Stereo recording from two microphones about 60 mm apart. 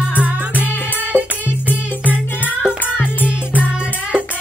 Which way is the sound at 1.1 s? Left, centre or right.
Centre.